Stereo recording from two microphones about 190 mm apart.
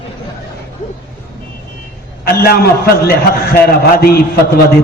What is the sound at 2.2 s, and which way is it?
A man's voice, 55° left (ahead or behind).